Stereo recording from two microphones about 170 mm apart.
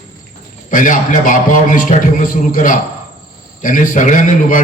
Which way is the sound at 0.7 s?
50° left (ahead or behind).